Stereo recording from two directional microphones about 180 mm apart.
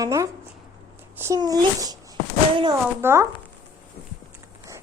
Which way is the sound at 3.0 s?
15° right (ahead or behind).